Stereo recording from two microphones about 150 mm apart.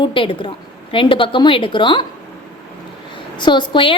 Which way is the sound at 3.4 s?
30° left (ahead or behind).